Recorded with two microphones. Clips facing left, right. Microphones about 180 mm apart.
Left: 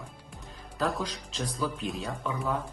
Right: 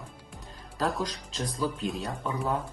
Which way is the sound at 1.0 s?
40° right (ahead or behind).